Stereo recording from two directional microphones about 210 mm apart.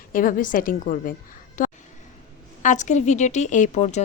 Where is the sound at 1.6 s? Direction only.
40° left (ahead or behind).